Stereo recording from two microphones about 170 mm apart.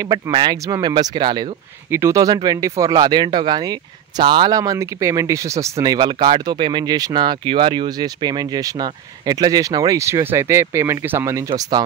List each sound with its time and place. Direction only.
0.0 s speech: 25° right (ahead or behind)
1.9 s speech: 15° right (ahead or behind)